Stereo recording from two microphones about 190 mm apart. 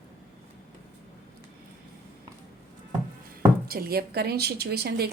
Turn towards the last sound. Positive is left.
turn(degrees=-55)  # may be behind; listen again after turning